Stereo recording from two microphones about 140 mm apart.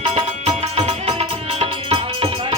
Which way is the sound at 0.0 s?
50° right (ahead or behind).